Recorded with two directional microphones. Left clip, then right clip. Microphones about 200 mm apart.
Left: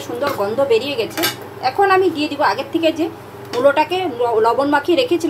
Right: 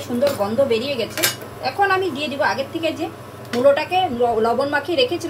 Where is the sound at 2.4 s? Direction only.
40° left (ahead or behind).